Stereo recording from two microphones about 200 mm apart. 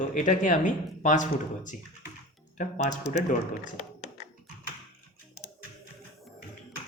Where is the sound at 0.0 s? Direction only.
40° left (ahead or behind).